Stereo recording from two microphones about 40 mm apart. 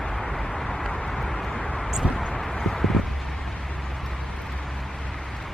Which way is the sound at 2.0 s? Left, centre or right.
Right.